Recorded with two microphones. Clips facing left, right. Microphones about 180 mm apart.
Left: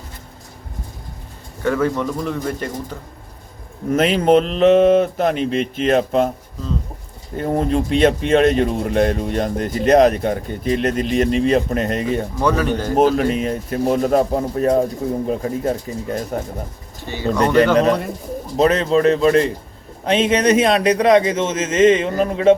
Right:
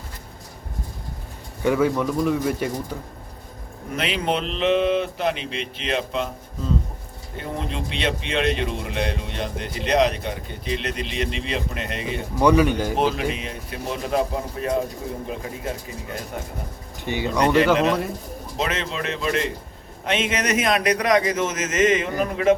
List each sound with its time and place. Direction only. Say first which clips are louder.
1.6 s speech: left 1 dB; 10° right (ahead or behind)
3.9 s a man's voice: left 10 dB; 45° left (ahead or behind)
7.3 s a man's voice: left 11 dB; 45° left (ahead or behind)
12.4 s speech: right 4 dB; 15° right (ahead or behind)
13.0 s a man's voice: left 7 dB; 45° left (ahead or behind)
17.0 s speech: right 2 dB; 15° right (ahead or behind)
18.5 s a man's voice: left 12 dB; 40° left (ahead or behind)